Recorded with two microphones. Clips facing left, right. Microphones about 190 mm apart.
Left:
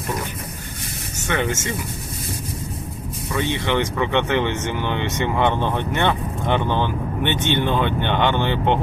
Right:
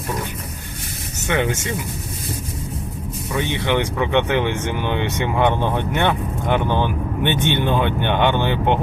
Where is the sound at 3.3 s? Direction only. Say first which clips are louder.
Right 1 dB; 15° right (ahead or behind).